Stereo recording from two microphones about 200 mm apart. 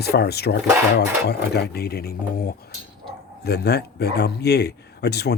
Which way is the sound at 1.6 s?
55° left (ahead or behind).